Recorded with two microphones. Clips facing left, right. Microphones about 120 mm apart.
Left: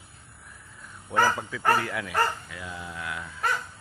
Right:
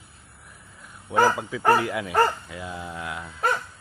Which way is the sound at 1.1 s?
15° right (ahead or behind).